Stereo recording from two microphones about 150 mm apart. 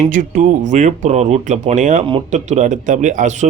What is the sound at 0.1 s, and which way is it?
A man's voice, 60° right (ahead or behind).